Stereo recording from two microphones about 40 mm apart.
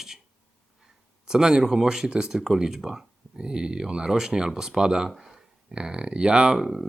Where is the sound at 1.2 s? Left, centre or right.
Centre.